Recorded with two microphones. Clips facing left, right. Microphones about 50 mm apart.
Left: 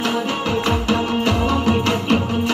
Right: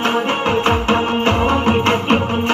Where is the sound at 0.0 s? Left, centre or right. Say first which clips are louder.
Right 4 dB; right.